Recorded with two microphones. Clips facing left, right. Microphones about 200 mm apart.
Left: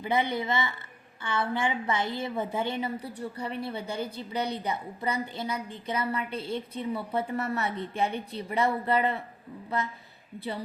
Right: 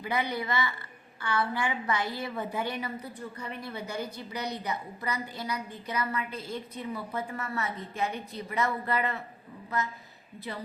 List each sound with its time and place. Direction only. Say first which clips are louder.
0.0 s a woman's voice: left 3 dB; 25° left (ahead or behind)